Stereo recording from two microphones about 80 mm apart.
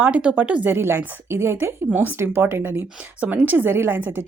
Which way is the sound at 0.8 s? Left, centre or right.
Right.